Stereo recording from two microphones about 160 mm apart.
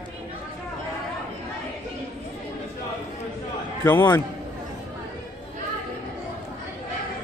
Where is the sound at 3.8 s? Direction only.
15° left (ahead or behind).